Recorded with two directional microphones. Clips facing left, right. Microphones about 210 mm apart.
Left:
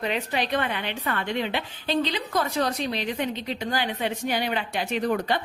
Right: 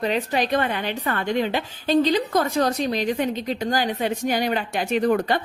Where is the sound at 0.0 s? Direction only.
40° right (ahead or behind).